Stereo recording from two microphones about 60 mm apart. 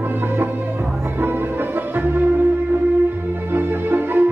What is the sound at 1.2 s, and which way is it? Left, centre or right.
Music, right.